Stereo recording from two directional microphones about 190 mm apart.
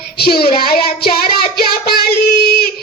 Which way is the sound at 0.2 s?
55° left (ahead or behind).